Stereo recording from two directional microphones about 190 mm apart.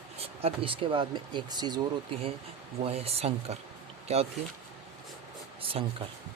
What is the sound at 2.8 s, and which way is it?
Speech, 30° right (ahead or behind).